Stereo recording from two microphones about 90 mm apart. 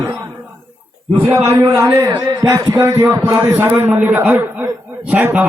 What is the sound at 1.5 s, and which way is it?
Speech, 40° right (ahead or behind).